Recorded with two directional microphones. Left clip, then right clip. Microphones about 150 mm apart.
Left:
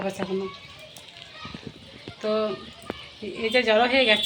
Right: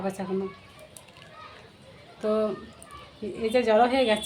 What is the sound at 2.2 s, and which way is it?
A woman's voice, 10° right (ahead or behind).